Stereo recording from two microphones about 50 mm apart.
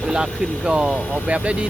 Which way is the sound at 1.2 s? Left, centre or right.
Right.